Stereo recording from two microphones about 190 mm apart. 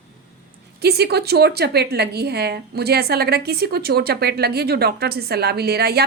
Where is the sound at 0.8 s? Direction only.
55° right (ahead or behind).